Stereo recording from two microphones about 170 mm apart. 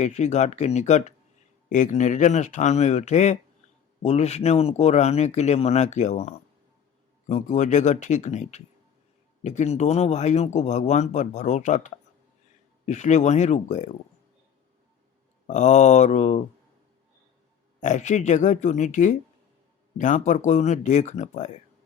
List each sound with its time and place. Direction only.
0.0 s speech: 40° left (ahead or behind)
15.4 s speech: 45° left (ahead or behind)
17.7 s speech: 45° left (ahead or behind)